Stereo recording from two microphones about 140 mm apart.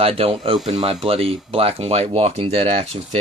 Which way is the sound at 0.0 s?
45° right (ahead or behind).